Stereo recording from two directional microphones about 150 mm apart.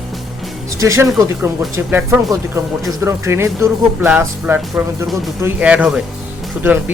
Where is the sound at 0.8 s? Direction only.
20° right (ahead or behind).